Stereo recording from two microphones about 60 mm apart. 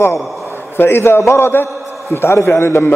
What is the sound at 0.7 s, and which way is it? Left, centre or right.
A man's voice, left.